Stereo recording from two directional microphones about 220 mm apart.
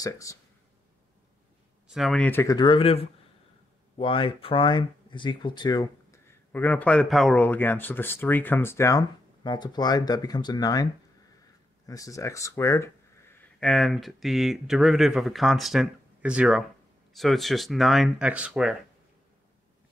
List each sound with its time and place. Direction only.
0.0 s speech: 15° left (ahead or behind)
1.9 s speech: centre (ahead or behind)